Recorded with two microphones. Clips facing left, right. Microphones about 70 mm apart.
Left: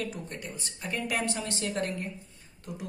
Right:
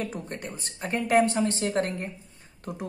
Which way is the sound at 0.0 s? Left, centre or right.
Right.